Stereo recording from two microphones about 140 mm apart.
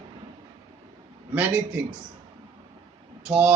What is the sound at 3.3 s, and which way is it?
Speech, 10° right (ahead or behind).